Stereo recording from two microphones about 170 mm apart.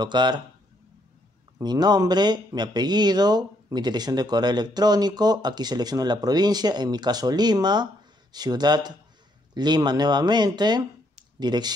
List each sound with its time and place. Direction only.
0.0 s speech: 25° right (ahead or behind)
1.6 s speech: 25° right (ahead or behind)